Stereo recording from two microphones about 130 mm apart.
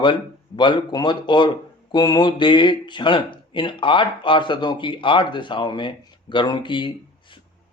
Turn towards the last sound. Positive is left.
turn(degrees=40)  # may be behind; listen again after turning